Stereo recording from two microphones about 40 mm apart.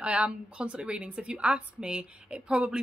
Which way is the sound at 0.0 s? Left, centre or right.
Right.